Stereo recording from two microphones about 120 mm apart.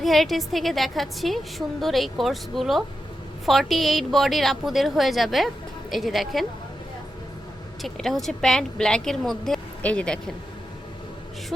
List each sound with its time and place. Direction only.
0.0 s a woman's voice: centre (ahead or behind)
7.8 s a woman's voice: centre (ahead or behind)